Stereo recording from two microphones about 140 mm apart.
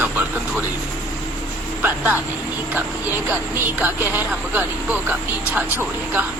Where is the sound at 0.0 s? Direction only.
15° right (ahead or behind).